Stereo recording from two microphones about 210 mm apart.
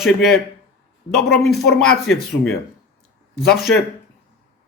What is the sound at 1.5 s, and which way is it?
Speech, centre (ahead or behind).